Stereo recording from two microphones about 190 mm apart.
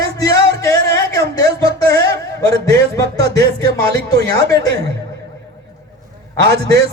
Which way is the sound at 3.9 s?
60° right (ahead or behind).